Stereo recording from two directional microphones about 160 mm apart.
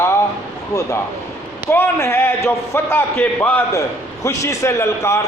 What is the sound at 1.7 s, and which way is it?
A man's voice, 15° left (ahead or behind).